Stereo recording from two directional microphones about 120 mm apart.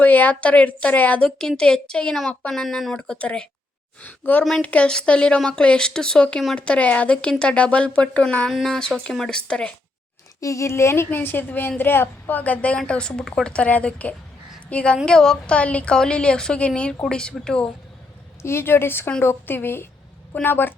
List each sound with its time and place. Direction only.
0.0 s speech: 15° left (ahead or behind)
10.4 s a woman's voice: 25° left (ahead or behind); by 17.7 s 5° left (ahead or behind)
18.4 s a woman's voice: 20° left (ahead or behind)